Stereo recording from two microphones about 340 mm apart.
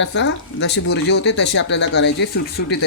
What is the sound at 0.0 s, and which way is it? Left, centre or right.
Speech, left.